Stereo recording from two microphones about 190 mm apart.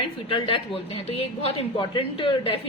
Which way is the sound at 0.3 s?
30° left (ahead or behind).